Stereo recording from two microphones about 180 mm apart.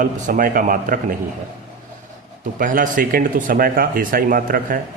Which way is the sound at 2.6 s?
50° right (ahead or behind).